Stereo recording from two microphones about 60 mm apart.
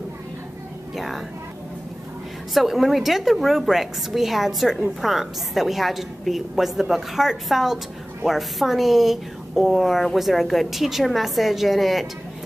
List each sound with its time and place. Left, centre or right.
0.9 s a woman's voice: centre
2.5 s a woman's voice: centre